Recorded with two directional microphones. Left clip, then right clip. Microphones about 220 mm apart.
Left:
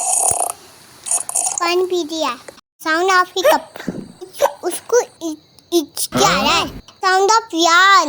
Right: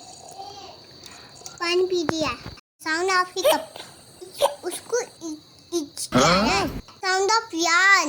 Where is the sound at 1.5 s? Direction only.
40° left (ahead or behind).